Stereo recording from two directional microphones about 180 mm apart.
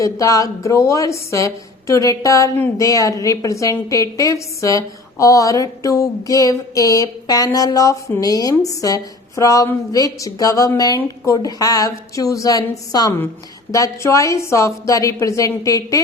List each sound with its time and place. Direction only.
0.0 s a woman's voice: 20° left (ahead or behind)